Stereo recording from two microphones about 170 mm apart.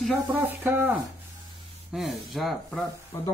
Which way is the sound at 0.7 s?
10° right (ahead or behind).